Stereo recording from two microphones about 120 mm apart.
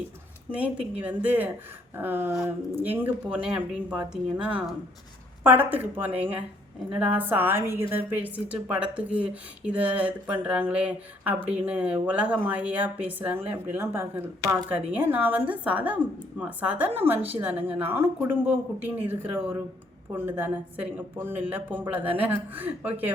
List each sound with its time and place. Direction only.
0.5 s speech: 10° right (ahead or behind)